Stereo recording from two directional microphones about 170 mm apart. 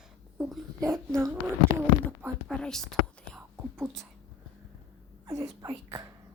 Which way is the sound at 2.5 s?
5° left (ahead or behind).